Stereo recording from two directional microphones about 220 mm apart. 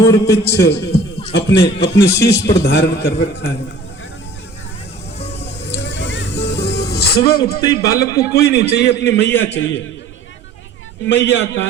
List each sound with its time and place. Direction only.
0.0 s a man's voice: 15° left (ahead or behind)
0.6 s a man's voice: 50° left (ahead or behind)
5.7 s vehicle: 55° left (ahead or behind)
6.6 s music: 45° left (ahead or behind)
7.3 s a man's voice: 45° left (ahead or behind)
7.9 s a man's voice: 15° left (ahead or behind)
8.3 s a man's voice: 45° left (ahead or behind)
11.0 s a man's voice: 50° left (ahead or behind)